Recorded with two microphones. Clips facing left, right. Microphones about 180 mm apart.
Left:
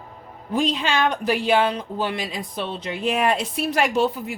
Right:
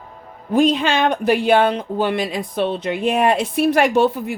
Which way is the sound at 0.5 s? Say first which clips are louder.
Right 6 dB; 55° right (ahead or behind).